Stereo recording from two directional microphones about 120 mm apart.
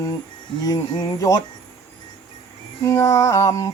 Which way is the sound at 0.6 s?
35° left (ahead or behind).